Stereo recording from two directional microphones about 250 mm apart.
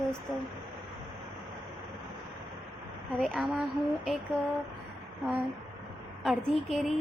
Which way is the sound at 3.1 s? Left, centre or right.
Centre.